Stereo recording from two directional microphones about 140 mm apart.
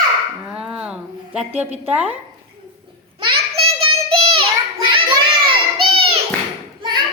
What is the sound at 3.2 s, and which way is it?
Child singing, 40° right (ahead or behind).